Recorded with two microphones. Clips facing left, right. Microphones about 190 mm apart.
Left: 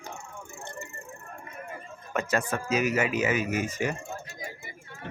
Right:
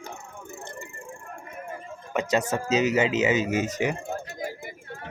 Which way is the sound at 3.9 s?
55° right (ahead or behind).